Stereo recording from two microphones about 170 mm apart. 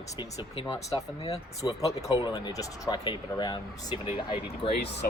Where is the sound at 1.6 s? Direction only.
20° left (ahead or behind).